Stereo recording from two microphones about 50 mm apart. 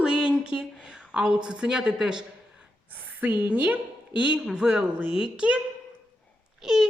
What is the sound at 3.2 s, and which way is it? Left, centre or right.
Speech, right.